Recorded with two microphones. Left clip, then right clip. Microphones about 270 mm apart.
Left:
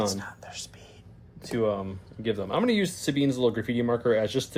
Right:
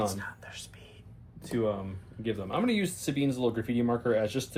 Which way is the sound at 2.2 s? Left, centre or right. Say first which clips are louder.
Left 4 dB; left.